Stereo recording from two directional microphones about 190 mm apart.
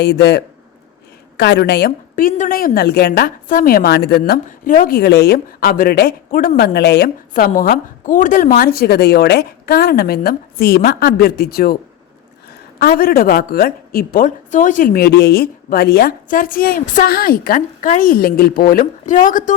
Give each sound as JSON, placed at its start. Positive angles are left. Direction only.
{"t": 0.0, "sound": "a man's voice", "side_deg": 60}
{"t": 12.8, "sound": "a woman's voice", "side_deg": 50}